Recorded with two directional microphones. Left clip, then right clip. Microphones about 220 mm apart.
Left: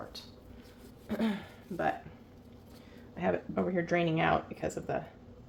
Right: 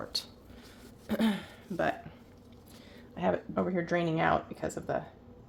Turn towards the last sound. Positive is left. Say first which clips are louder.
# right 1 dB
turn(degrees=-20)  # may be behind; listen again after turning